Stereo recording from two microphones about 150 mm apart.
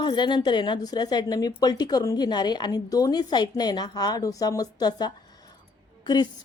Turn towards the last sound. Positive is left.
turn(degrees=30)  # may be behind; listen again after turning